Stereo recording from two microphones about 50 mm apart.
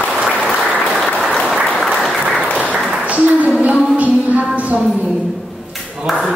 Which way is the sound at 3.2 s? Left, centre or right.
Right.